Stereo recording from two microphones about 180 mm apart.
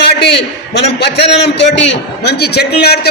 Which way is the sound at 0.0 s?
70° left (ahead or behind).